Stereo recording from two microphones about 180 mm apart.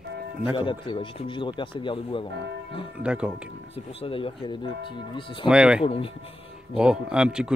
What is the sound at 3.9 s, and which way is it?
A man's voice, 30° left (ahead or behind).